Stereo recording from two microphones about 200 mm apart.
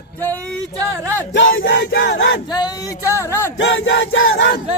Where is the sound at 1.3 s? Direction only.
70° left (ahead or behind); by 2.2 s 50° left (ahead or behind).